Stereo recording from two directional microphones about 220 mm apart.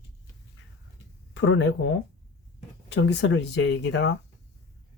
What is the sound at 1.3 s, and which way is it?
Speech, 55° left (ahead or behind).